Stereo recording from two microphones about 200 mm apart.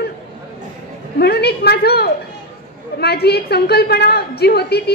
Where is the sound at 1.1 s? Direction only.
55° left (ahead or behind).